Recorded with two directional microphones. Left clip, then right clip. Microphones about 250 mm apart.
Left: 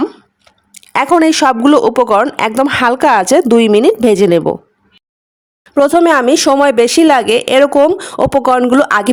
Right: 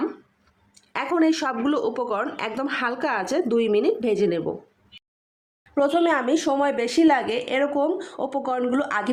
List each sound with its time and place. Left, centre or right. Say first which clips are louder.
0.7 s speech: left 15 dB; left
5.7 s speech: left 12 dB; left